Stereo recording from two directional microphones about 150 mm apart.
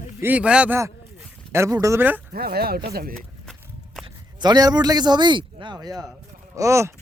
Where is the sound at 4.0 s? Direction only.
30° right (ahead or behind).